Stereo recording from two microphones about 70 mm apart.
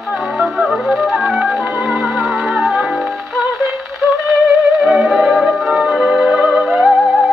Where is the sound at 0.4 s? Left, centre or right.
Centre.